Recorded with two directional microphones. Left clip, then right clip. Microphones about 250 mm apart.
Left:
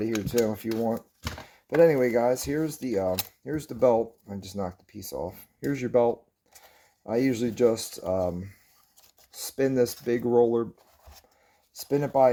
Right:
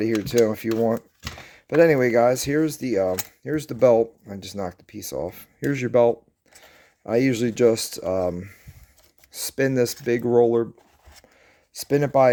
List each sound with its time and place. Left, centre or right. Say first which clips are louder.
0.0 s speech: right 6 dB; right
11.7 s speech: right 5 dB; right